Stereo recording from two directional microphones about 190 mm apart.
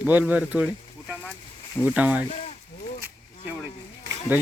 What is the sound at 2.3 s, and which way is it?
Speech, 35° left (ahead or behind).